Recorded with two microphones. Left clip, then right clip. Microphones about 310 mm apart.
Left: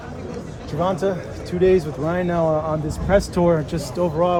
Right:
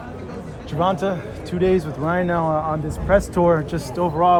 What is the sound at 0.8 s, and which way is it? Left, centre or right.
A man's voice, centre.